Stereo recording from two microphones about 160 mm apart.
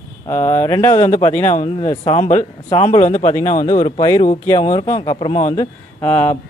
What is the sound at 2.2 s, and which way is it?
Speech, 45° left (ahead or behind).